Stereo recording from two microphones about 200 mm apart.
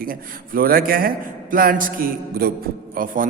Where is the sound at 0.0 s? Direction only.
45° right (ahead or behind).